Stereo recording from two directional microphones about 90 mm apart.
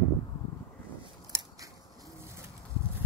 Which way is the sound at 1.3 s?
30° right (ahead or behind).